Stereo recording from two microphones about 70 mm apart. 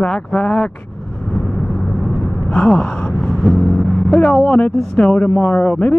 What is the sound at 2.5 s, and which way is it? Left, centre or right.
Speech, centre.